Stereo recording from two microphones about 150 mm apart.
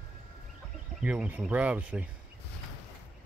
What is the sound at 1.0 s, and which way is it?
Speech, 10° right (ahead or behind).